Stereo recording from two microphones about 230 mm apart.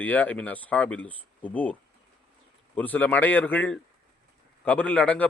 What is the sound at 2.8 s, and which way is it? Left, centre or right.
A man's voice, centre.